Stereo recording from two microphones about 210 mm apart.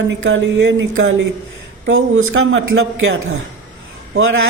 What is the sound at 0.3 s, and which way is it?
A man's voice, 70° right (ahead or behind).